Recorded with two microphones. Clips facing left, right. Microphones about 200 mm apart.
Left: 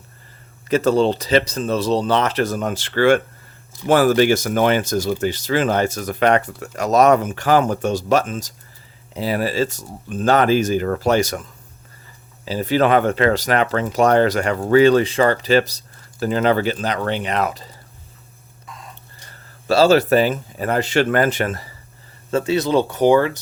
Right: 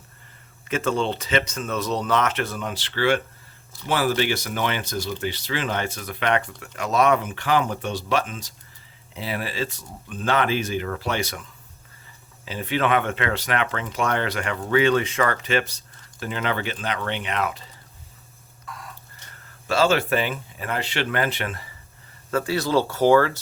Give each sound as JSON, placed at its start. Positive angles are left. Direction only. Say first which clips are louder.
{"t": 0.7, "sound": "speech", "louder": "left 8 dB", "side_deg": 40}
{"t": 12.5, "sound": "speech", "louder": "left 6 dB", "side_deg": 35}
{"t": 18.6, "sound": "printer", "louder": "even", "side_deg": 20}
{"t": 19.1, "sound": "speech", "louder": "left 3 dB", "side_deg": 35}
{"t": 22.3, "sound": "speech", "louder": "left 5 dB", "side_deg": 25}